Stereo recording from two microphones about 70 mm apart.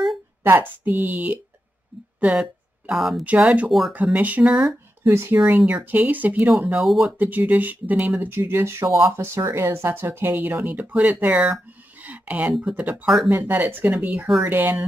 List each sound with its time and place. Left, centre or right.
0.4 s speech: right
2.3 s speech: centre
3.3 s speech: centre
5.0 s speech: right
5.7 s speech: centre
6.7 s speech: centre
7.2 s speech: right
12.0 s a sound: right
12.5 s speech: centre
13.0 s speech: centre
13.3 s speech: right
14.0 s speech: centre